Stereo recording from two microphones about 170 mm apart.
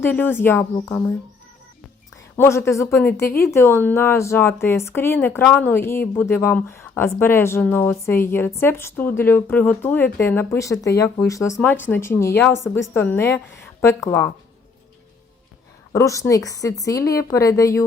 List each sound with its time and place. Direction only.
0.0 s a woman's voice: 10° left (ahead or behind)
2.3 s a woman's voice: 15° left (ahead or behind)
15.9 s a woman's voice: 20° left (ahead or behind)